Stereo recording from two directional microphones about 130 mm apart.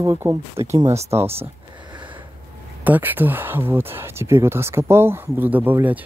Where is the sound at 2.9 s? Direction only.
15° right (ahead or behind).